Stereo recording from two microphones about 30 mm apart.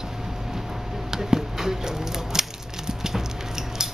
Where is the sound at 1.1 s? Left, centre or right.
Centre.